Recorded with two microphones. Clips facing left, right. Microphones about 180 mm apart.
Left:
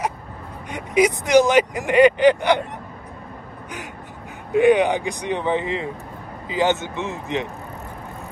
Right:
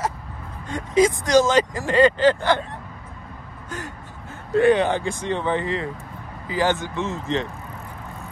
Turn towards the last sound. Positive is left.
turn(degrees=15)  # may be behind; listen again after turning